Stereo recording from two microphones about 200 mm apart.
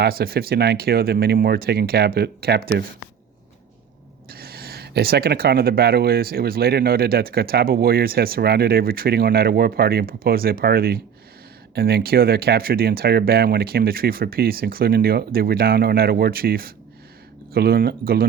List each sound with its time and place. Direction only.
0.0 s speech: 50° right (ahead or behind)
4.3 s speech: 50° right (ahead or behind)